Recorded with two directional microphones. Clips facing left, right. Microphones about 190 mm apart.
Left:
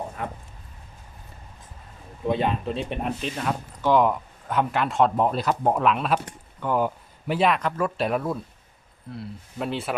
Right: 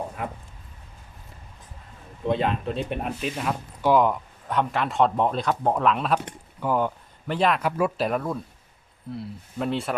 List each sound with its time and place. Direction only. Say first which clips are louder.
0.2 s a man's voice: left 1 dB; 5° right (ahead or behind)
2.2 s a man's voice: even; centre (ahead or behind)